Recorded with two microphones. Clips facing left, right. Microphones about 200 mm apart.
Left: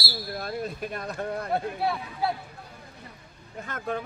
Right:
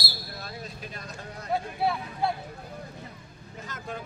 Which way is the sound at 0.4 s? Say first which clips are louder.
Left 9 dB; 55° left (ahead or behind).